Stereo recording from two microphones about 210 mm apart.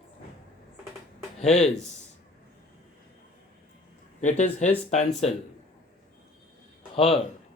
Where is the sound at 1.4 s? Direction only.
30° left (ahead or behind).